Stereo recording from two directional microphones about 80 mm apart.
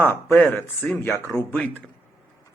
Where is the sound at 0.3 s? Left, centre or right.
Left.